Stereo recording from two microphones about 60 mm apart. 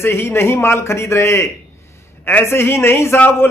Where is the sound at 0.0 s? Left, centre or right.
Left.